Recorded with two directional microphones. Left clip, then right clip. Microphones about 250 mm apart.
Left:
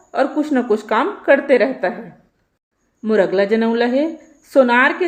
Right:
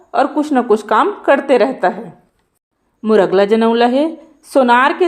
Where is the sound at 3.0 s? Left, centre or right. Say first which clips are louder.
Right 4 dB; centre.